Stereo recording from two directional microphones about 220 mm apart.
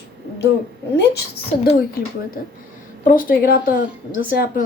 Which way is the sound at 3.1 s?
40° left (ahead or behind).